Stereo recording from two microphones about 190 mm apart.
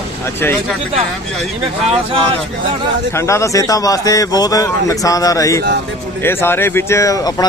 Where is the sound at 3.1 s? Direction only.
15° left (ahead or behind).